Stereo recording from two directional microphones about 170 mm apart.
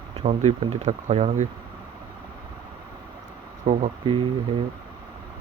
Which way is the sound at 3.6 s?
45° right (ahead or behind).